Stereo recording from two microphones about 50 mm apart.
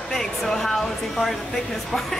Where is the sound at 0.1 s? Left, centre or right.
Centre.